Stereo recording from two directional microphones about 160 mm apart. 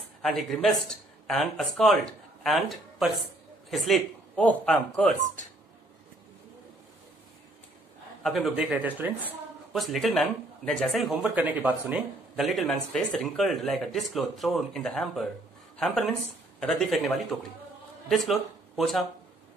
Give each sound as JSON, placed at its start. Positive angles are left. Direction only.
{"t": 0.2, "sound": "speech", "side_deg": 0}
{"t": 8.2, "sound": "speech", "side_deg": 0}
{"t": 9.8, "sound": "speech", "side_deg": 0}